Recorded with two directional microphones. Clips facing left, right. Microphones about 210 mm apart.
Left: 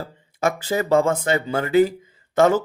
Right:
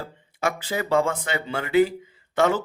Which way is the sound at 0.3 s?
45° left (ahead or behind).